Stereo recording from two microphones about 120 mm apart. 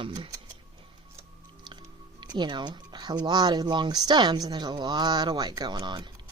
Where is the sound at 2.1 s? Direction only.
40° right (ahead or behind).